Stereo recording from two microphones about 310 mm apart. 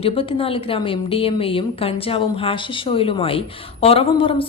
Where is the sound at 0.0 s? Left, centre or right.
Centre.